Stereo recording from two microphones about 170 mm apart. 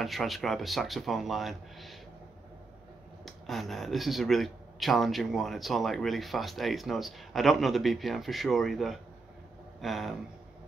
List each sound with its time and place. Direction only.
0.0 s speech: centre (ahead or behind)
3.3 s speech: centre (ahead or behind)